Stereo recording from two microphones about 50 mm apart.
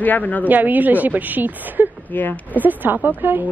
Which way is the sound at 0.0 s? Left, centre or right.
Left.